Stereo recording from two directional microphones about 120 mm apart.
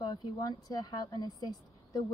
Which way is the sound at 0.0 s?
35° left (ahead or behind).